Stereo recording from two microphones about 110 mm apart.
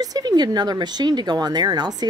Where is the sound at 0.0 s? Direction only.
35° right (ahead or behind).